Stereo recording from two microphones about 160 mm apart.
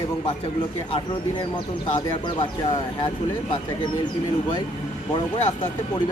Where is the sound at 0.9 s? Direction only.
30° left (ahead or behind).